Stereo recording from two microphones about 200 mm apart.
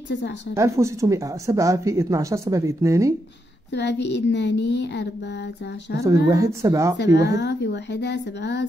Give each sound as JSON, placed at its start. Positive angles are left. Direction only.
{"t": 0.6, "sound": "speech", "side_deg": -15}
{"t": 3.7, "sound": "a woman's voice", "side_deg": 60}
{"t": 6.0, "sound": "speech", "side_deg": -15}
{"t": 7.3, "sound": "a woman's voice", "side_deg": 60}